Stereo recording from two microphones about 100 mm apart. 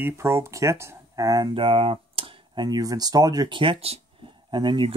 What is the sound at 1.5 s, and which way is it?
Speech, 65° right (ahead or behind).